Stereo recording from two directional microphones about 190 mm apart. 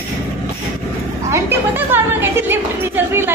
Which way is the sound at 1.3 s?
15° right (ahead or behind).